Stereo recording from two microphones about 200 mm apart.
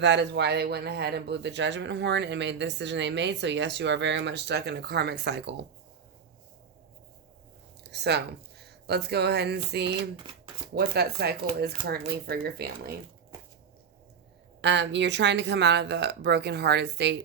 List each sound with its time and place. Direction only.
0.0 s speech: 60° right (ahead or behind)
7.9 s a woman's voice: 55° right (ahead or behind)
14.6 s speech: 60° right (ahead or behind)